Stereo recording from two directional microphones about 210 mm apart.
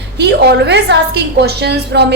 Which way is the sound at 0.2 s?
55° right (ahead or behind).